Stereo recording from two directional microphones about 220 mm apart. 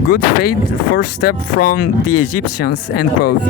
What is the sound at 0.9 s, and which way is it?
Speech, 45° left (ahead or behind).